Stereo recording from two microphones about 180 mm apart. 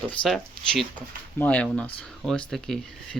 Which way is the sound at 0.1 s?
5° left (ahead or behind).